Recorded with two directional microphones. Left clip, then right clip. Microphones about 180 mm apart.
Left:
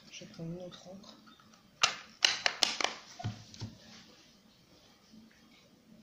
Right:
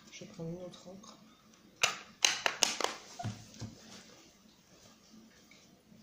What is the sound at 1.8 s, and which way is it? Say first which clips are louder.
Tap: left 2 dB; 15° right (ahead or behind).